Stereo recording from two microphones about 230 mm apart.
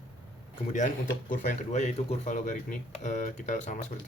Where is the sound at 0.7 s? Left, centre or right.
Left.